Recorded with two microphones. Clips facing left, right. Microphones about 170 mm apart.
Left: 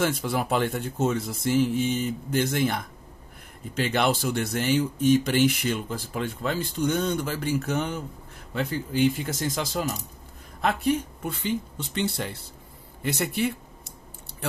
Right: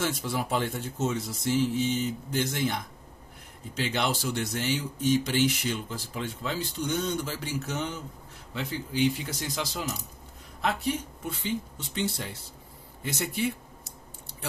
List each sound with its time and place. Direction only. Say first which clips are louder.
0.0 s speech: left 4 dB; 60° left (ahead or behind)